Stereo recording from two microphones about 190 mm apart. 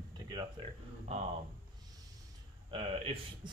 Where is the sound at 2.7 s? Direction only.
30° right (ahead or behind).